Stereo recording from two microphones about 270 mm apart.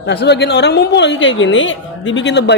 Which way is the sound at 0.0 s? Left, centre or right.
Left.